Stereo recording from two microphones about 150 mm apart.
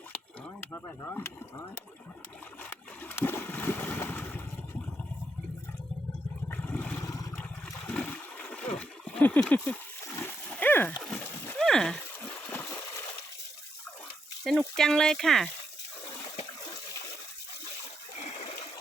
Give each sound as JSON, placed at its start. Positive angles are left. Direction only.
{"t": 0.1, "sound": "a sound", "side_deg": 10}
{"t": 2.6, "sound": "boat", "side_deg": 10}
{"t": 6.5, "sound": "vehicle", "side_deg": 10}
{"t": 7.0, "sound": "vehicle", "side_deg": 20}
{"t": 7.7, "sound": "water", "side_deg": 10}
{"t": 11.0, "sound": "splash", "side_deg": 10}
{"t": 12.6, "sound": "water", "side_deg": 20}
{"t": 14.8, "sound": "speech", "side_deg": 5}